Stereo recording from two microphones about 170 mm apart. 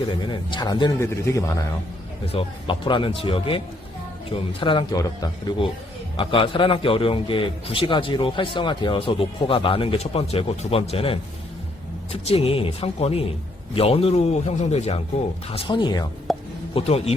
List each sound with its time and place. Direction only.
0.1 s a man's voice: 30° left (ahead or behind)
2.2 s a man's voice: 30° left (ahead or behind)
16.3 s a sound: centre (ahead or behind)
16.7 s a man's voice: 35° left (ahead or behind)